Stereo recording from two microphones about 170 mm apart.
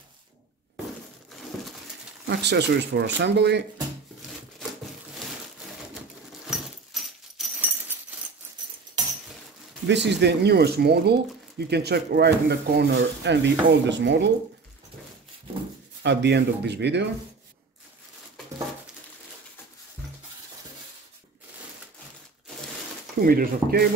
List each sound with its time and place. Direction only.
1.5 s pigeon: centre (ahead or behind)
2.2 s speech: 75° right (ahead or behind)
6.4 s a sound: centre (ahead or behind)
9.8 s speech: 90° right
16.0 s speech: 90° right
23.1 s speech: 60° right (ahead or behind)